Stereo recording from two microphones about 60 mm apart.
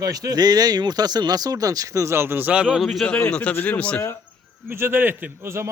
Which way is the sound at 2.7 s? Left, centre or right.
Centre.